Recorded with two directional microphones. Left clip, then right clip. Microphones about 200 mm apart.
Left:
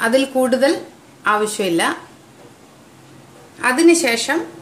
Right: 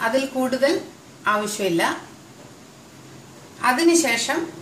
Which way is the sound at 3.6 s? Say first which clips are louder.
Left 4 dB; 55° left (ahead or behind).